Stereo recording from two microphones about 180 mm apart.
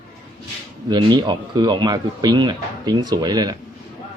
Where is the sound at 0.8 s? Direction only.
25° right (ahead or behind).